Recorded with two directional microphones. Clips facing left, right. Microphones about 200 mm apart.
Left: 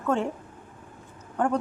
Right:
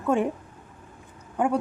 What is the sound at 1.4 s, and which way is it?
Speech, 10° right (ahead or behind).